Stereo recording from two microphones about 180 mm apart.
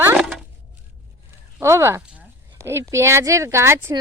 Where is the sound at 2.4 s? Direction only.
15° right (ahead or behind).